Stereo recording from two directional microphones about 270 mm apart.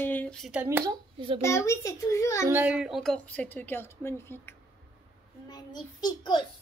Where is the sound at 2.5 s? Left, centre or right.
Centre.